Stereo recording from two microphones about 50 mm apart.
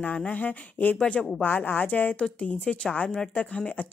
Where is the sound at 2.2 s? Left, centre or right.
Left.